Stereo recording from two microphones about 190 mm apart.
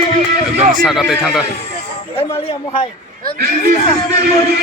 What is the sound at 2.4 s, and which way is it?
Speech, 30° left (ahead or behind).